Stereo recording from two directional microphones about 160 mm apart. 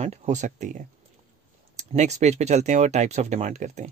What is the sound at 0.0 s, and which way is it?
Speech, 45° right (ahead or behind).